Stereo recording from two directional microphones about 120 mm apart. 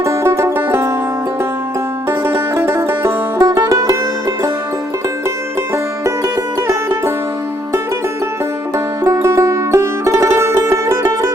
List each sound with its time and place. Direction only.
0.0 s music: 25° right (ahead or behind)
2.0 s music: 20° right (ahead or behind)
5.7 s music: 25° right (ahead or behind)
9.0 s music: 20° right (ahead or behind)